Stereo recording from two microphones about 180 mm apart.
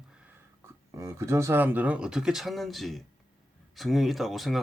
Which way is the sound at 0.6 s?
15° right (ahead or behind).